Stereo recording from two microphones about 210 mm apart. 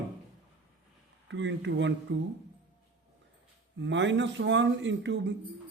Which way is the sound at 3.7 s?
60° right (ahead or behind).